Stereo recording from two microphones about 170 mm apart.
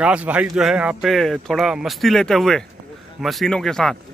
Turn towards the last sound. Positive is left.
turn(degrees=5)  # may be behind; listen again after turning